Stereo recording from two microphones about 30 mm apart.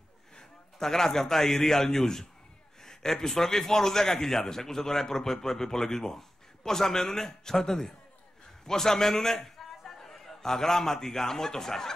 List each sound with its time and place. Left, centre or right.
0.7 s a man's voice: centre
8.6 s a sound: centre
10.4 s a man's voice: centre